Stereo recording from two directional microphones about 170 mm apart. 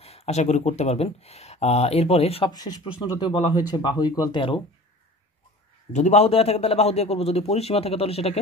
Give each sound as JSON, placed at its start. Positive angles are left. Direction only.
{"t": 0.0, "sound": "speech", "side_deg": 35}
{"t": 2.5, "sound": "speech", "side_deg": 25}
{"t": 5.9, "sound": "speech", "side_deg": 40}